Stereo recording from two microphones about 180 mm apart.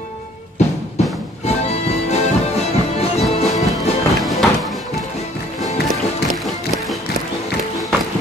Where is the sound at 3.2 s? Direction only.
Centre (ahead or behind).